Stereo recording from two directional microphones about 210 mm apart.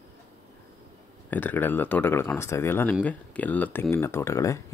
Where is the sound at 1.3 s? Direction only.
10° left (ahead or behind).